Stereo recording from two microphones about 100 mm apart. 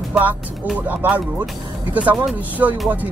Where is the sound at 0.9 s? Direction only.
20° right (ahead or behind).